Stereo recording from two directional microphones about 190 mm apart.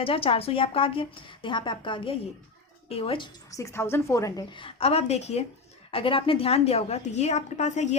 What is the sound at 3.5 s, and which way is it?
Speech, 15° left (ahead or behind).